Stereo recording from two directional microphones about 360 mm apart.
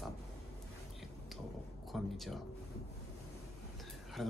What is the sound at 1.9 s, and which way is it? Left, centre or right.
Speech, centre.